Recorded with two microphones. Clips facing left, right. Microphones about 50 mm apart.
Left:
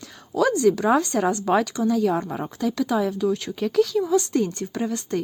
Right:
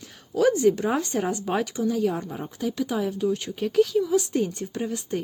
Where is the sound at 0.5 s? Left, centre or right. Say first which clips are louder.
Left 3 dB; left.